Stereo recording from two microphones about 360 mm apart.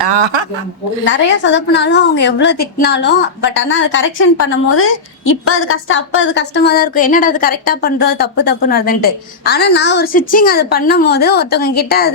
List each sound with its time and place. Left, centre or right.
1.0 s speech: left